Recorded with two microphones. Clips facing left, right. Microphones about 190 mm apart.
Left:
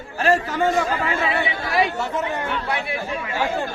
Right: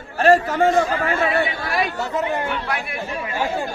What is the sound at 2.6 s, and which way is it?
Speech, 25° left (ahead or behind).